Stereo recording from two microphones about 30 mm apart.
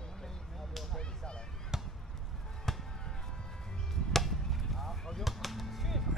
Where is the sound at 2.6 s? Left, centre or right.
Centre.